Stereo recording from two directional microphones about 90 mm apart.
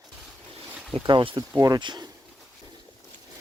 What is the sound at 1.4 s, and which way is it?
Speech, 45° right (ahead or behind).